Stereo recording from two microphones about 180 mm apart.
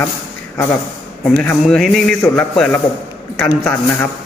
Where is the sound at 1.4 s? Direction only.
5° left (ahead or behind).